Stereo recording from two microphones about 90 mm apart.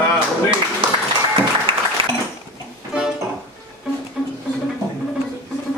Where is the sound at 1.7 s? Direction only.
90° right.